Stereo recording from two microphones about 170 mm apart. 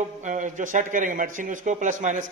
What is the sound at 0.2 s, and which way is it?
Speech, 45° right (ahead or behind).